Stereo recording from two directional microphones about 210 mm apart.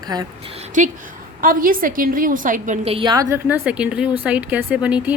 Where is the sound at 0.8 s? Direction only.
35° right (ahead or behind).